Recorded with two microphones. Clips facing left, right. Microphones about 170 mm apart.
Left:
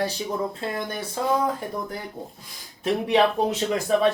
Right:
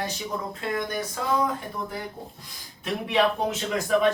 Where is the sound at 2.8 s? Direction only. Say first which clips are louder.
Left 4 dB; 35° left (ahead or behind).